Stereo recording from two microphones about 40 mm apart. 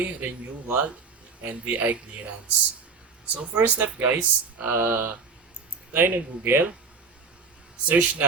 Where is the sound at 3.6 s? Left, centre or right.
Right.